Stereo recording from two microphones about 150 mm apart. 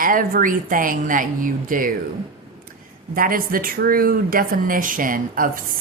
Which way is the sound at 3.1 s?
70° right (ahead or behind).